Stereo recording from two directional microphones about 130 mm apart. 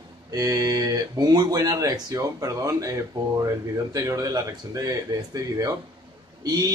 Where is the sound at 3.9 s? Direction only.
25° right (ahead or behind).